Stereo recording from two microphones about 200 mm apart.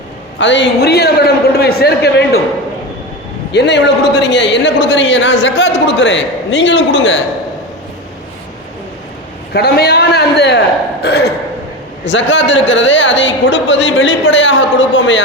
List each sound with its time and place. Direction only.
0.3 s a woman's voice: 65° left (ahead or behind)
3.5 s a woman's voice: 60° left (ahead or behind)
9.5 s a man's voice: 50° left (ahead or behind)
12.0 s a man's voice: 65° left (ahead or behind)